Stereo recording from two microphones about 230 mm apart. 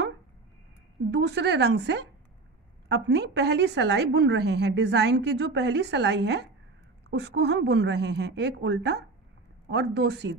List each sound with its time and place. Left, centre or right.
1.1 s a woman's voice: right